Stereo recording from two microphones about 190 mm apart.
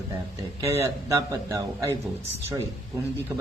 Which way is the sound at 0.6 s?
15° right (ahead or behind).